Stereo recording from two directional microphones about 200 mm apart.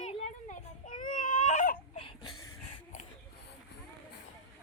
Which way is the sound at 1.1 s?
40° left (ahead or behind).